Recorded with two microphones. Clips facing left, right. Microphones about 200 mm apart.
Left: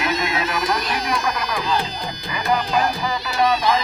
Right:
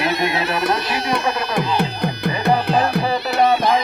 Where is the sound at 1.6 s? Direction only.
65° right (ahead or behind).